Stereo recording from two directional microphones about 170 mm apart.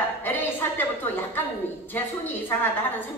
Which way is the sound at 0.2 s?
10° left (ahead or behind).